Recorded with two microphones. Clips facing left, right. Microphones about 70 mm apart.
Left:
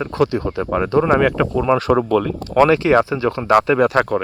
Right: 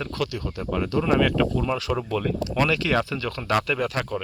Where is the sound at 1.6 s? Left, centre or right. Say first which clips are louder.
Left 10 dB; left.